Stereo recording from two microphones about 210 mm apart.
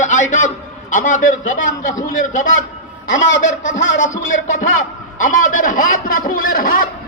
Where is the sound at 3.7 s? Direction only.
65° left (ahead or behind).